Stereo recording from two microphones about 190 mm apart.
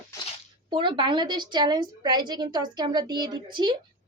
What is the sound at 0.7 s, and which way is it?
A woman's voice, 25° right (ahead or behind).